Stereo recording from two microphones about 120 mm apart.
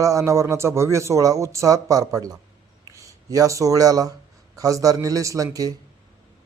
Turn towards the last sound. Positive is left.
turn(degrees=-30)  # may be behind; listen again after turning